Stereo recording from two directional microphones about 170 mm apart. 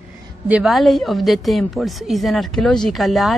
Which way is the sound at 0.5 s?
5° right (ahead or behind).